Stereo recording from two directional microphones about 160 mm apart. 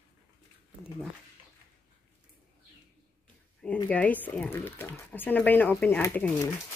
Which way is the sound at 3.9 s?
10° left (ahead or behind).